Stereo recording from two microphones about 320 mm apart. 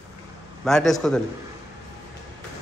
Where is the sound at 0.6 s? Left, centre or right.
Centre.